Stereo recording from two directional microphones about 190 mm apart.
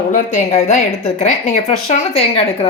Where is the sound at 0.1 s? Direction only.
40° left (ahead or behind).